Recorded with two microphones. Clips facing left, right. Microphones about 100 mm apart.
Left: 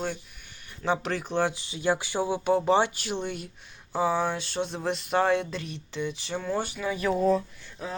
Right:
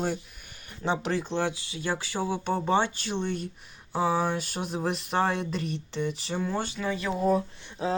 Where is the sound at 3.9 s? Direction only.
Centre (ahead or behind).